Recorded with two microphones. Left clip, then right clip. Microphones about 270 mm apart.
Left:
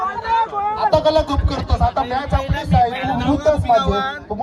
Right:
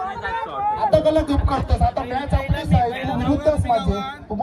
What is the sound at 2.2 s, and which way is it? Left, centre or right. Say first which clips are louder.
Heart sounds: left 3 dB; left.